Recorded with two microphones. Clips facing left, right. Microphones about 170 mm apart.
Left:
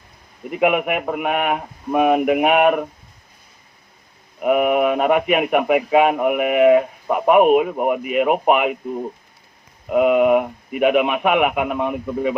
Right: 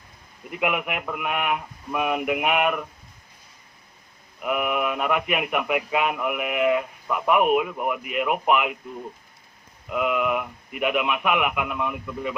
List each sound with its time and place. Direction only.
0.5 s a man's voice: 55° left (ahead or behind)
4.4 s a man's voice: 45° left (ahead or behind)